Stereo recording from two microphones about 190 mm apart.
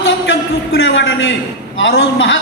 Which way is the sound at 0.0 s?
90° left.